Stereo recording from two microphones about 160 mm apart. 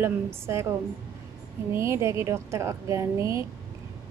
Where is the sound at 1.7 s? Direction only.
15° right (ahead or behind).